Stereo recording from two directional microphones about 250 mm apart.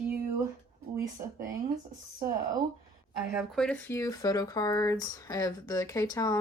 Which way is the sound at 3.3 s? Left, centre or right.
Centre.